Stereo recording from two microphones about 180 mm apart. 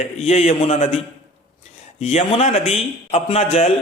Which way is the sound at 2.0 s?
35° left (ahead or behind).